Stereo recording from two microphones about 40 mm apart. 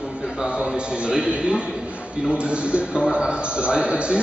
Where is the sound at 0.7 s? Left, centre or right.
Right.